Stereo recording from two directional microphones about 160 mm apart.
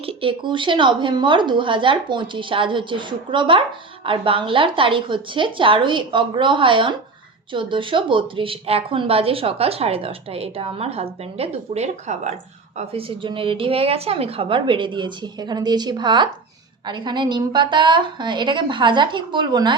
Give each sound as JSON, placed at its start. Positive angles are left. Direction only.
{"t": 0.0, "sound": "a woman's voice", "side_deg": -35}